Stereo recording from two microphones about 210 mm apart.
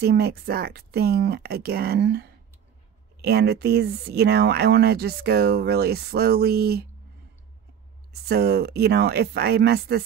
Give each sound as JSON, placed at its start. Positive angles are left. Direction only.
{"t": 0.0, "sound": "speech", "side_deg": -50}
{"t": 8.1, "sound": "speech", "side_deg": -50}